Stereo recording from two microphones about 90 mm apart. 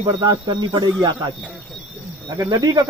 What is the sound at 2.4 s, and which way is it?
Speech, 45° right (ahead or behind).